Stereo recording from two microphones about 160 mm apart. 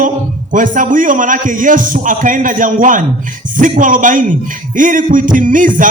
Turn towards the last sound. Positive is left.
turn(degrees=-55)  # may be behind; listen again after turning